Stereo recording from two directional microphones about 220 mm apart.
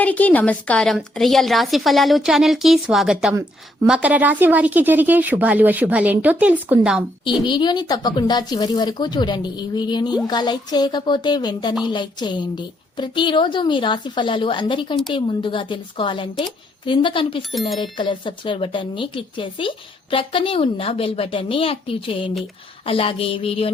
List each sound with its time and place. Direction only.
0.0 s a woman's voice: 5° left (ahead or behind)
7.4 s speech: 20° left (ahead or behind)
17.5 s a woman's voice: centre (ahead or behind)
17.9 s speech: 20° left (ahead or behind)